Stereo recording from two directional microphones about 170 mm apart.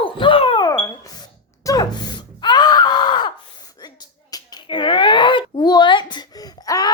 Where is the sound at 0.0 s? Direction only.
30° left (ahead or behind).